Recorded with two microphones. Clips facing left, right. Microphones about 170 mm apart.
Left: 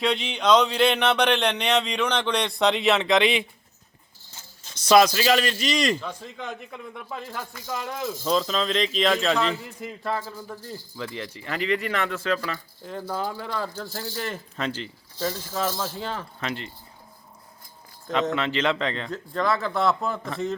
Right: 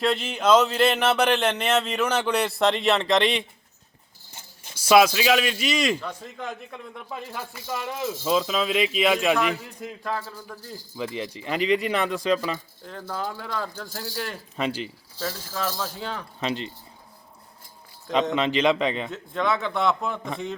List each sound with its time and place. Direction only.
0.0 s speech: centre (ahead or behind)
4.6 s speech: 5° right (ahead or behind)
9.6 s speech: centre (ahead or behind)
10.9 s speech: 15° right (ahead or behind)
12.8 s speech: 5° left (ahead or behind)
14.5 s speech: 15° right (ahead or behind)
15.2 s speech: centre (ahead or behind)
16.4 s speech: 20° right (ahead or behind)
18.1 s speech: 20° right (ahead or behind)
19.1 s speech: centre (ahead or behind)